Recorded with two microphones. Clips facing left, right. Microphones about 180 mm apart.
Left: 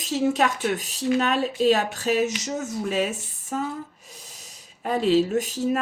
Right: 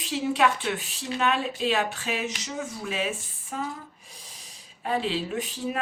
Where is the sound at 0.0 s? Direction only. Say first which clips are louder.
Left 2 dB; 40° left (ahead or behind).